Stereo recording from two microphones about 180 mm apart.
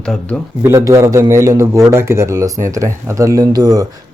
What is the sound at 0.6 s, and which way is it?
A man's voice, 15° right (ahead or behind).